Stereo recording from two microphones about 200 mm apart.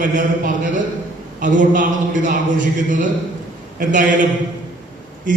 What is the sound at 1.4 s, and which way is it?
Speech, 40° right (ahead or behind).